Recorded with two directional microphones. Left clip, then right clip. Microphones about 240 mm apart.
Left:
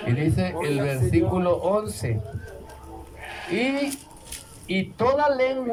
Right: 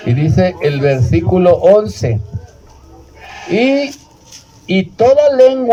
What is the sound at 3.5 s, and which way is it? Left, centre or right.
A man's voice, right.